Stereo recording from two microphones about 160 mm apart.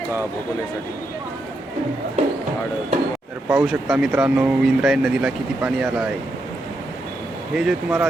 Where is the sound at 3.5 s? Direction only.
5° right (ahead or behind).